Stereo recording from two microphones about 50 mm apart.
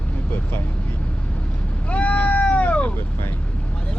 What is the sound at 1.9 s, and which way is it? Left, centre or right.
Cat, left.